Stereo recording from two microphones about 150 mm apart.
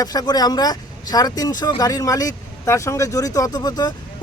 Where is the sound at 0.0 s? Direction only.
25° left (ahead or behind).